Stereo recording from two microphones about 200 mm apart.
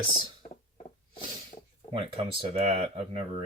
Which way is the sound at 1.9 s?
25° right (ahead or behind).